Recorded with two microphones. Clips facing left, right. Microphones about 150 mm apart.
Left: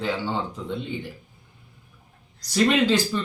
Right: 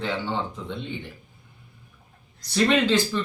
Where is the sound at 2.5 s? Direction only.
10° left (ahead or behind).